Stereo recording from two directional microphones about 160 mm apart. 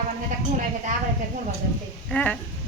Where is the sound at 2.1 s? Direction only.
10° left (ahead or behind).